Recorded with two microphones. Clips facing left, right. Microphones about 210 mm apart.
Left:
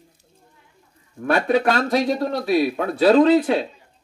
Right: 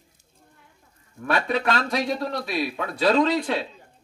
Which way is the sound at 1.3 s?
45° left (ahead or behind).